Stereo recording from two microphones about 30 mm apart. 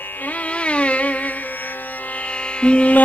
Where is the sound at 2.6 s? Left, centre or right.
Left.